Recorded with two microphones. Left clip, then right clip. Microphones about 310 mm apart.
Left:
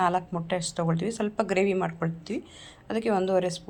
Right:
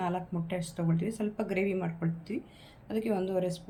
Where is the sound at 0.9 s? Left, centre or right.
Centre.